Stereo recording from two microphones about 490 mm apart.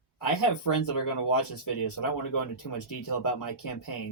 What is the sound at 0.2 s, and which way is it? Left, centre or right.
Speech, left.